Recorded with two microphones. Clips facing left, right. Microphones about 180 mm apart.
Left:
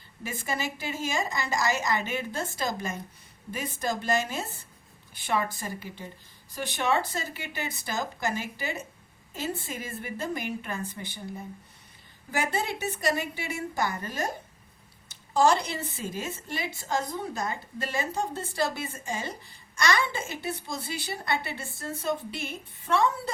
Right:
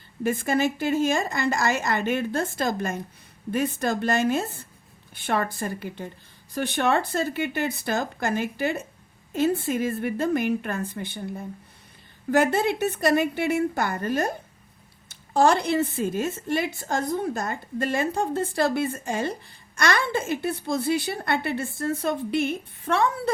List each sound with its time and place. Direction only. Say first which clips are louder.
0.2 s a woman's voice: right 10 dB; 55° right (ahead or behind)
12.3 s a woman's voice: right 9 dB; 65° right (ahead or behind)
15.3 s a woman's voice: right 3 dB; 55° right (ahead or behind)